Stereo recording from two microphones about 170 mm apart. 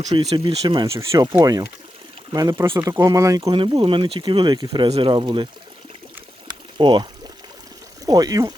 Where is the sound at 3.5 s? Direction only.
30° right (ahead or behind).